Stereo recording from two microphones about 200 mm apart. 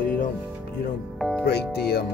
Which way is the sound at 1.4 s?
55° left (ahead or behind).